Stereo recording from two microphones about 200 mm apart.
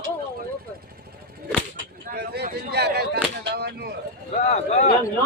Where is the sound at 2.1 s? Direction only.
55° right (ahead or behind).